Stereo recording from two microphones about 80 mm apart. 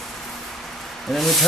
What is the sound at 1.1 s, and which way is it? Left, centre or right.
Speech, centre.